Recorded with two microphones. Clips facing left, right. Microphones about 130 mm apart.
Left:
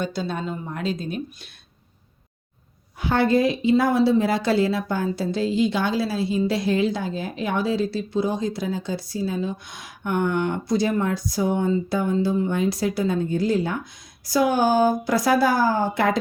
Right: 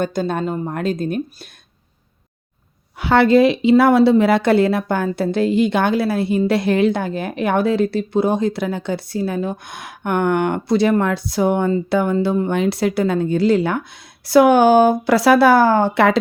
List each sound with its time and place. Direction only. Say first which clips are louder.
0.0 s speech: right 6 dB; 50° right (ahead or behind)
3.0 s a woman's voice: right 7 dB; 80° right